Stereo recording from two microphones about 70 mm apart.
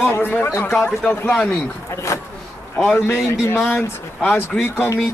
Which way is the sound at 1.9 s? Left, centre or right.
Left.